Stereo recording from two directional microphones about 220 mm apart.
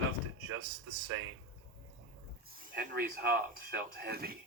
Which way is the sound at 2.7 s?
45° right (ahead or behind).